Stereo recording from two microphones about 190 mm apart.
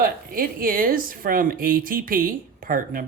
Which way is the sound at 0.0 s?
50° right (ahead or behind).